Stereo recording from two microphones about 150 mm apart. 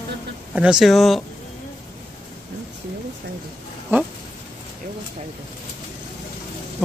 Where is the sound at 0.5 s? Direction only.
5° right (ahead or behind).